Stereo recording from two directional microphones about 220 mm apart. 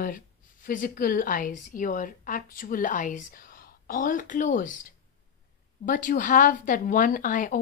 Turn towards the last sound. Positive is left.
turn(degrees=35)  # may be behind; listen again after turning